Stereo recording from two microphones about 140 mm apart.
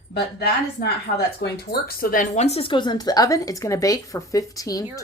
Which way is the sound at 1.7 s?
90° left.